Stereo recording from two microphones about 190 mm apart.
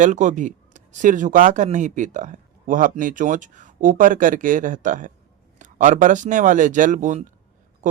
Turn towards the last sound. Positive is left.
turn(degrees=-40)  # may be behind; listen again after turning